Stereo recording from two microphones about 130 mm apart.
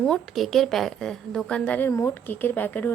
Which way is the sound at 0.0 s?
5° left (ahead or behind).